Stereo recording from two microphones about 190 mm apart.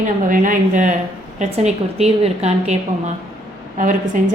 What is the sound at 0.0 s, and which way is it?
A woman's voice, 45° right (ahead or behind).